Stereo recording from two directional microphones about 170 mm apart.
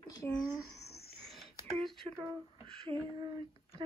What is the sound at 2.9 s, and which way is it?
Speech, 25° right (ahead or behind).